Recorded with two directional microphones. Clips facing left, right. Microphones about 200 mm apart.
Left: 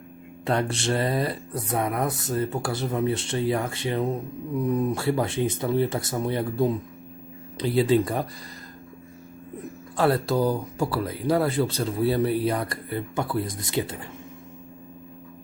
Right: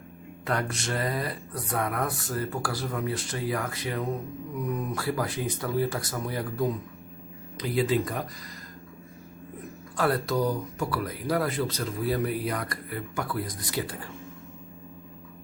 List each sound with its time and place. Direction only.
0.4 s speech: 30° left (ahead or behind)
10.0 s speech: 30° left (ahead or behind)